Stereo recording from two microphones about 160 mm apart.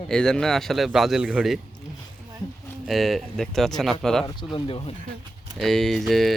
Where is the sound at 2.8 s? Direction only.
Centre (ahead or behind).